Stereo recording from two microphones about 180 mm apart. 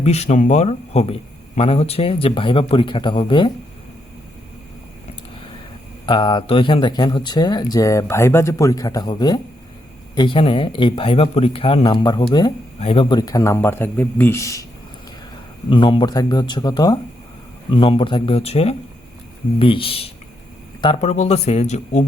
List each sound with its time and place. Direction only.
0.0 s speech: 35° left (ahead or behind)
6.1 s speech: 25° left (ahead or behind)
15.7 s speech: 25° left (ahead or behind)